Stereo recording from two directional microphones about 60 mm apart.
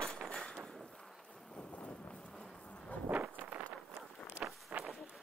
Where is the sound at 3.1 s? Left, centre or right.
Right.